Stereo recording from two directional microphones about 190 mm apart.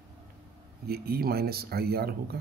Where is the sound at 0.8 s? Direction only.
55° right (ahead or behind).